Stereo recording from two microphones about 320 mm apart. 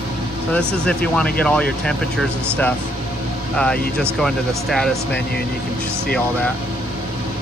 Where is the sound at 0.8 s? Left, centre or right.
Centre.